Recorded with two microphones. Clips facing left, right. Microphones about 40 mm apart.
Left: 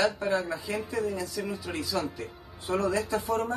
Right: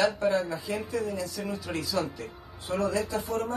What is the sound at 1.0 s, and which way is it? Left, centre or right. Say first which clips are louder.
Speech: left 1 dB; centre.